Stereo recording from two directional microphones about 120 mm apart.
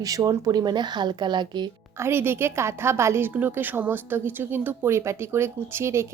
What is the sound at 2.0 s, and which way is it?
A woman's voice, 20° right (ahead or behind).